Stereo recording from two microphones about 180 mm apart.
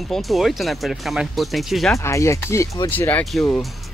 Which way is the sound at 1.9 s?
15° left (ahead or behind).